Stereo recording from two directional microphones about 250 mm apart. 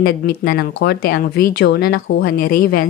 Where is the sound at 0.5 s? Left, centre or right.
Left.